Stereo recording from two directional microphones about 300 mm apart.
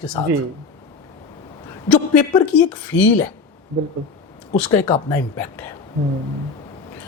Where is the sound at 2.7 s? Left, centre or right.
Centre.